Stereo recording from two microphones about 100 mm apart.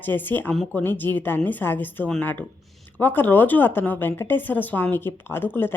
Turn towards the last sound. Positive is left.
turn(degrees=20)  # may be behind; listen again after turning